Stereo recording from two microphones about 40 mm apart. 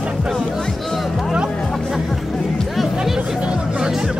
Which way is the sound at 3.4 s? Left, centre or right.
Right.